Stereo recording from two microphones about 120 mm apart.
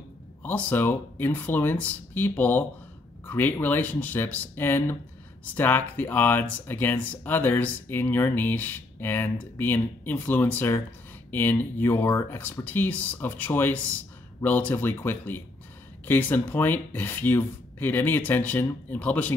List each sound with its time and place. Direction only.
0.4 s speech: 15° left (ahead or behind)